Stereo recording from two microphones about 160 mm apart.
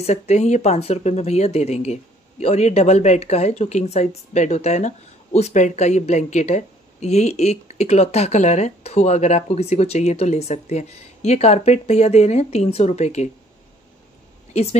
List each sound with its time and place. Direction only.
0.0 s speech: 45° left (ahead or behind)
14.5 s speech: 40° left (ahead or behind)